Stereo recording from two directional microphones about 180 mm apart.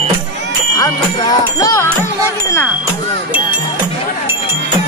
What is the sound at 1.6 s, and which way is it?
Music, 20° left (ahead or behind).